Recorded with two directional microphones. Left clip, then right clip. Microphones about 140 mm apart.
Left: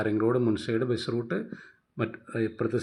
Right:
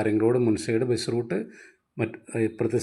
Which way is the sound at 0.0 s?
45° right (ahead or behind).